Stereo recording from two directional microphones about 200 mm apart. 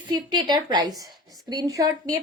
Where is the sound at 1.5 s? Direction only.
20° right (ahead or behind).